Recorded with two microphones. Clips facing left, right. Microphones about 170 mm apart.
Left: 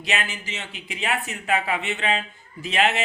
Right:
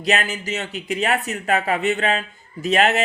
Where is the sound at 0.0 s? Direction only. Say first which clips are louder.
Right 6 dB; 40° right (ahead or behind).